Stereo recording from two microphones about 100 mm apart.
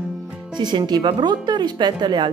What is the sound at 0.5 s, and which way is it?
A woman's voice, 45° right (ahead or behind).